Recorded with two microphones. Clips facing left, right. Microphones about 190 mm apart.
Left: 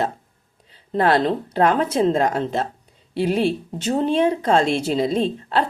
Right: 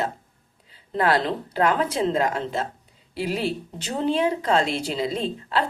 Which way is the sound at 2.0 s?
45° left (ahead or behind).